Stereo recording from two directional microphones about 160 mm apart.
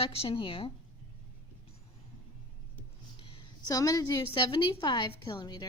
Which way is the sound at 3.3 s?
25° left (ahead or behind).